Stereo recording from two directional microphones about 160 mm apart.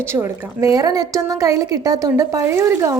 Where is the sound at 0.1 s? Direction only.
15° right (ahead or behind).